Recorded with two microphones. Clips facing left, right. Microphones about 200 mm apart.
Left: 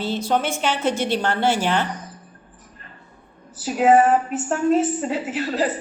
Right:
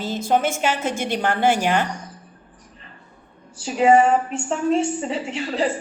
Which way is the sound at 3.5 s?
5° left (ahead or behind).